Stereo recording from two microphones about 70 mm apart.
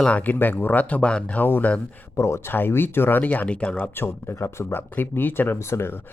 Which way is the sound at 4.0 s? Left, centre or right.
Left.